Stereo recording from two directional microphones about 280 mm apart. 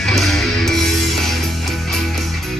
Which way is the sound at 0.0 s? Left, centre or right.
Centre.